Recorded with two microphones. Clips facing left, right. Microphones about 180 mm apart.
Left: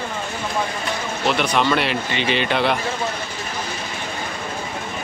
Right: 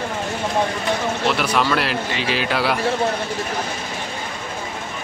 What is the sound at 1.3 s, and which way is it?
Speech, 5° right (ahead or behind).